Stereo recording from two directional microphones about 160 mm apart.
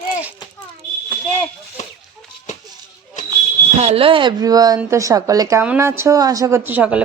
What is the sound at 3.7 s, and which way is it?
A woman's voice, 40° right (ahead or behind).